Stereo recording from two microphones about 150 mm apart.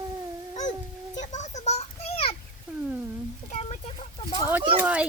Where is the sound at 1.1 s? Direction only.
50° left (ahead or behind).